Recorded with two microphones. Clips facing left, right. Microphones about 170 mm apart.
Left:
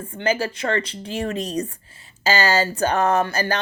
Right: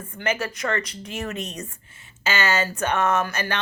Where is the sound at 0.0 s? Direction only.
30° left (ahead or behind).